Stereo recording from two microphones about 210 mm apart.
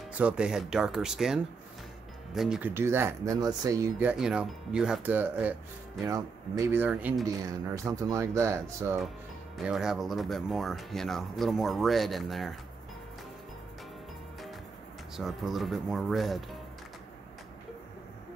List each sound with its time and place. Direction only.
0.2 s speech: 5° right (ahead or behind)
15.1 s speech: centre (ahead or behind)